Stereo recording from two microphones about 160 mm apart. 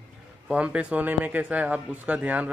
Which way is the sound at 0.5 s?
5° right (ahead or behind).